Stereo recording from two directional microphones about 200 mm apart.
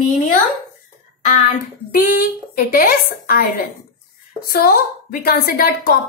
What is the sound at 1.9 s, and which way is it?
A woman's voice, 45° left (ahead or behind).